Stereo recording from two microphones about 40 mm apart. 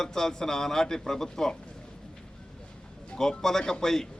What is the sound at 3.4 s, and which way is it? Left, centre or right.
Speech, centre.